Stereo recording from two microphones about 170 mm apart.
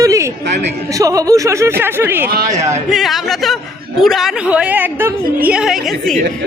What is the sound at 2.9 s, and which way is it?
Speech, centre (ahead or behind).